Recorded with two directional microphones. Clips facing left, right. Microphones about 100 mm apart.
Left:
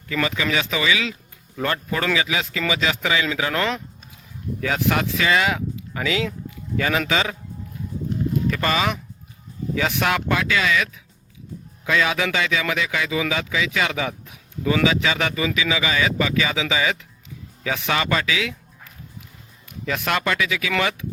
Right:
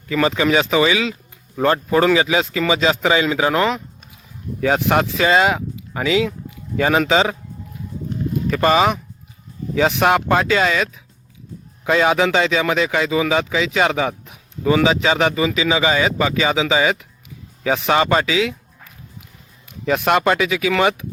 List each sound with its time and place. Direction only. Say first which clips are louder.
0.1 s a man's voice: right 6 dB; 30° right (ahead or behind)
8.4 s a man's voice: right 9 dB; 25° right (ahead or behind)
11.9 s a man's voice: right 6 dB; 30° right (ahead or behind)
19.8 s a man's voice: right 7 dB; 25° right (ahead or behind)